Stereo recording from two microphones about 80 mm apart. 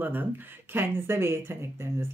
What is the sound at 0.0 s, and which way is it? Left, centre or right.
Speech, right.